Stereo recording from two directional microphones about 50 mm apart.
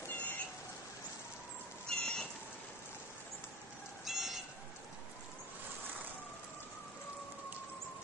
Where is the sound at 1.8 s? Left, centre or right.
Centre.